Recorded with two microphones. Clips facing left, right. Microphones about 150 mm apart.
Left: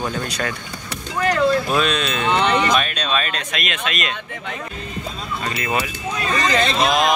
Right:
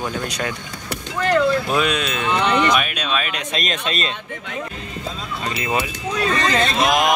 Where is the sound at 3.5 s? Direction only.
35° right (ahead or behind).